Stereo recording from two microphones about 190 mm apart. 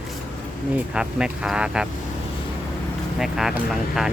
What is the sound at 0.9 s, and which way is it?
Speech, 5° right (ahead or behind).